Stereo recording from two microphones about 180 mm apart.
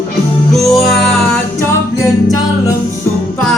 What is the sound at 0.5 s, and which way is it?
Music, centre (ahead or behind).